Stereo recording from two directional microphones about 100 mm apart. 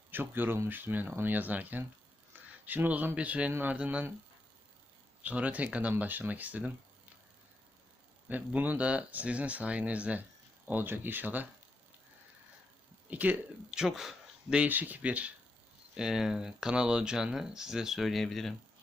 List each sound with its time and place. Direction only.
0.1 s speech: 20° right (ahead or behind)
5.2 s speech: 15° right (ahead or behind)
8.3 s speech: 15° right (ahead or behind)
13.1 s speech: 15° right (ahead or behind)
13.7 s speech: 5° right (ahead or behind)